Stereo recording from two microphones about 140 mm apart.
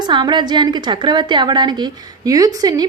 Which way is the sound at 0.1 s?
30° right (ahead or behind).